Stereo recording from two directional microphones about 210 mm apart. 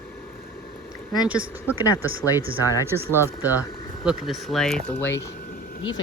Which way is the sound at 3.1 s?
10° left (ahead or behind).